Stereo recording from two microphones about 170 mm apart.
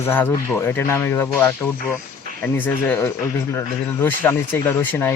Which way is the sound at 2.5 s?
10° left (ahead or behind).